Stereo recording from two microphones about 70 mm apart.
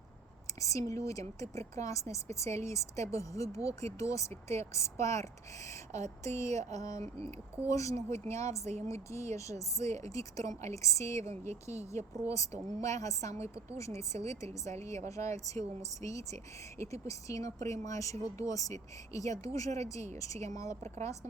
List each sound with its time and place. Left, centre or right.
0.6 s speech: left
6.2 s speech: left